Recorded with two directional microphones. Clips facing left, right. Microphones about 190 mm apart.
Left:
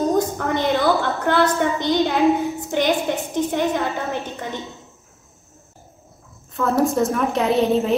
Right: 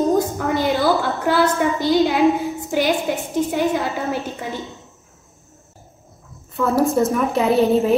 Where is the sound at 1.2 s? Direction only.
5° right (ahead or behind).